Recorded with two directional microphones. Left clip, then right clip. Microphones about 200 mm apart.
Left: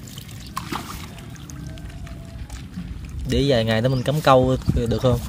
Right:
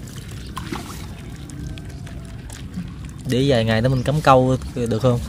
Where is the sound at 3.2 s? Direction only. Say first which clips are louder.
Right 1 dB; 5° left (ahead or behind).